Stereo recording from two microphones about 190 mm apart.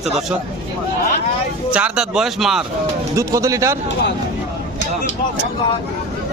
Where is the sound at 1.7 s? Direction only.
5° right (ahead or behind).